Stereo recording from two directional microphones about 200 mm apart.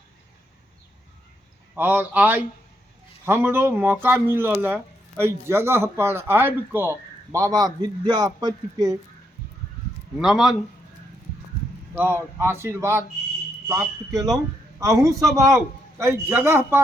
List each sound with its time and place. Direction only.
1.7 s a man's voice: 10° right (ahead or behind)
10.2 s a man's voice: 5° right (ahead or behind)
11.9 s speech: 10° right (ahead or behind)